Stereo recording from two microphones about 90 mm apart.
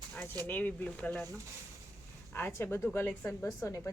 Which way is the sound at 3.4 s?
40° left (ahead or behind).